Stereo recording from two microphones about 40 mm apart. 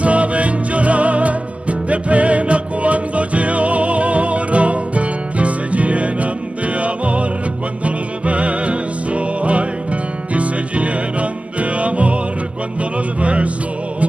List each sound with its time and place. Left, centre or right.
0.0 s music: right
13.2 s music: right